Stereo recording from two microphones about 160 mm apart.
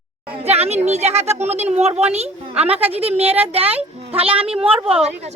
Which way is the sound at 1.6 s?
45° right (ahead or behind).